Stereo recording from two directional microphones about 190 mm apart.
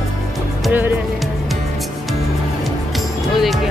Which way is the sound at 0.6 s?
10° right (ahead or behind).